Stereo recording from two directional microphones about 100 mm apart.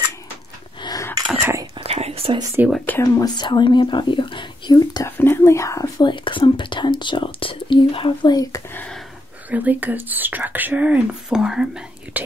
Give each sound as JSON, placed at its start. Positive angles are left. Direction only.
{"t": 1.4, "sound": "whispering", "side_deg": -30}
{"t": 1.8, "sound": "whispering", "side_deg": -90}
{"t": 2.6, "sound": "speech", "side_deg": -20}
{"t": 3.0, "sound": "speech", "side_deg": 40}
{"t": 5.0, "sound": "speech", "side_deg": 25}
{"t": 6.0, "sound": "speech", "side_deg": 55}
{"t": 8.3, "sound": "speech", "side_deg": 35}
{"t": 9.5, "sound": "speech", "side_deg": -15}